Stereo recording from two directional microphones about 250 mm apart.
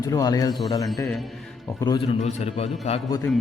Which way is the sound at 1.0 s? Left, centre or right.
Centre.